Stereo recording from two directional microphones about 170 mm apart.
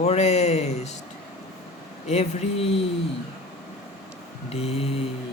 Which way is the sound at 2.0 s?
40° left (ahead or behind).